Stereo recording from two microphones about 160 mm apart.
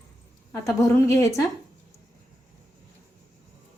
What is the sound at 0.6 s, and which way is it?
Speech, 20° left (ahead or behind).